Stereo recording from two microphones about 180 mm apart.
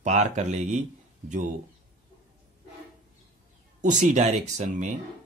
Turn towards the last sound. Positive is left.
turn(degrees=-40)  # may be behind; listen again after turning